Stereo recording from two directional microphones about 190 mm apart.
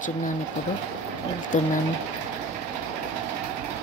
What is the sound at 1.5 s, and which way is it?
Speech, 40° left (ahead or behind).